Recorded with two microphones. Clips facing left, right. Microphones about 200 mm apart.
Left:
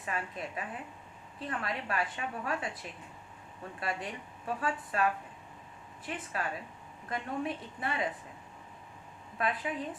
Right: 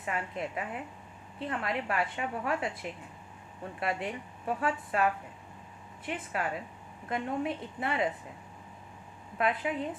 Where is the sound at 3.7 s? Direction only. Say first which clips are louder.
Right 4 dB; 25° right (ahead or behind).